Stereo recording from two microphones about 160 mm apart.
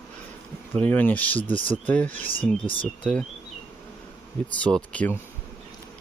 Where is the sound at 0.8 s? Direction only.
10° left (ahead or behind).